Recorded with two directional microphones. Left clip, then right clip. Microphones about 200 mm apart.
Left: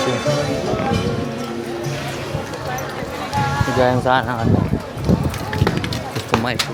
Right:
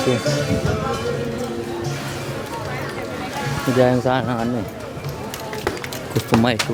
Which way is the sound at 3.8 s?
30° right (ahead or behind).